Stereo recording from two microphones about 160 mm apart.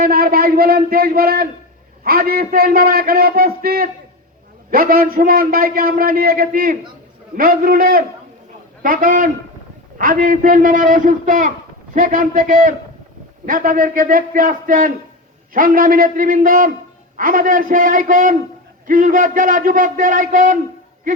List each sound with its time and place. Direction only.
0.0 s a man's voice: 65° right (ahead or behind)